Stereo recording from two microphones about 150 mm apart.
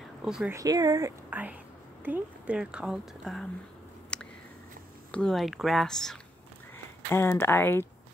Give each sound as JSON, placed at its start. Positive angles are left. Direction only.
{"t": 0.2, "sound": "speech", "side_deg": -5}
{"t": 0.5, "sound": "speech", "side_deg": -25}
{"t": 1.3, "sound": "speech", "side_deg": -10}
{"t": 4.1, "sound": "a sound", "side_deg": 5}
{"t": 5.1, "sound": "speech", "side_deg": 5}
{"t": 7.1, "sound": "speech", "side_deg": 15}